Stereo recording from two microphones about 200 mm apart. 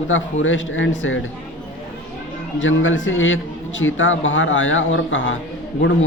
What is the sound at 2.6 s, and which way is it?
Speech, 75° left (ahead or behind).